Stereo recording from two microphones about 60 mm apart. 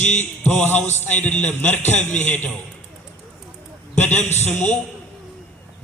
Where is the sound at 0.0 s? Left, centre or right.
Left.